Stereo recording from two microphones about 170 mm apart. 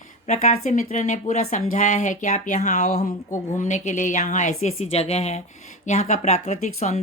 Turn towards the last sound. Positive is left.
turn(degrees=40)  # may be behind; listen again after turning